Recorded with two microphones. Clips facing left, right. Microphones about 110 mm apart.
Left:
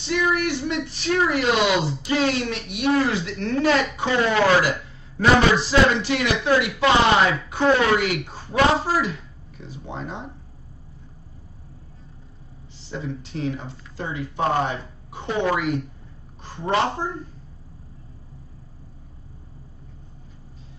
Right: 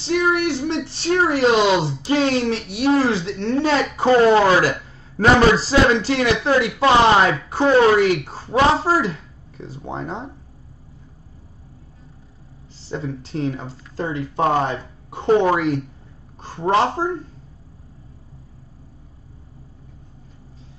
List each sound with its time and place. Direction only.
0.0 s speech: 30° right (ahead or behind)
12.7 s speech: 35° right (ahead or behind)
15.4 s speech: 30° right (ahead or behind)